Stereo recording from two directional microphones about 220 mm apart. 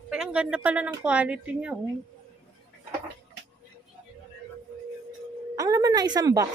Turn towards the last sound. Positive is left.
turn(degrees=-15)  # may be behind; listen again after turning